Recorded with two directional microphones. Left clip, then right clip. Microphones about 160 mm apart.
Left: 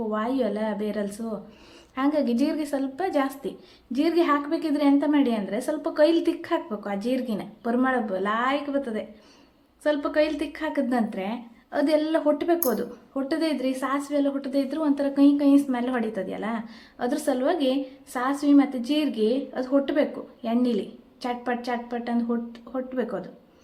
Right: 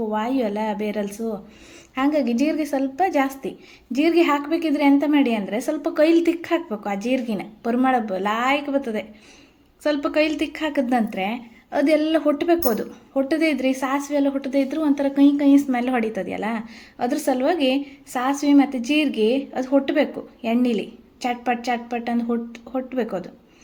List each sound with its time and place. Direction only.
0.1 s a woman's voice: 20° right (ahead or behind)